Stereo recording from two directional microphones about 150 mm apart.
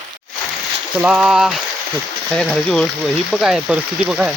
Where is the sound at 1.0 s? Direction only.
5° right (ahead or behind).